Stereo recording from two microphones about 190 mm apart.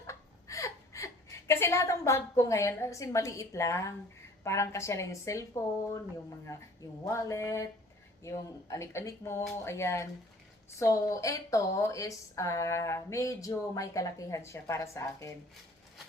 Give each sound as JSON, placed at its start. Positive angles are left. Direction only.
{"t": 0.1, "sound": "a sound", "side_deg": 15}
{"t": 4.4, "sound": "a woman's voice", "side_deg": 15}
{"t": 7.0, "sound": "a woman's voice", "side_deg": 15}